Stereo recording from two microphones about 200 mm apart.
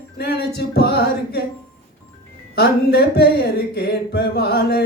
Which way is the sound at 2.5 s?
55° left (ahead or behind).